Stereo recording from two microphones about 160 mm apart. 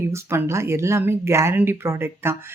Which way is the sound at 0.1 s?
15° right (ahead or behind).